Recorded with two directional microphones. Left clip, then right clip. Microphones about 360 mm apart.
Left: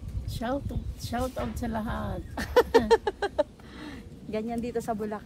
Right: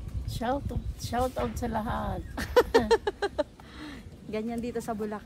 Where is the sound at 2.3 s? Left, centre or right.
Centre.